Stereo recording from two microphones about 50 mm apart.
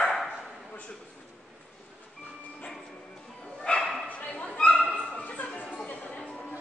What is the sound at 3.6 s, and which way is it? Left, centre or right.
Bow-wow, centre.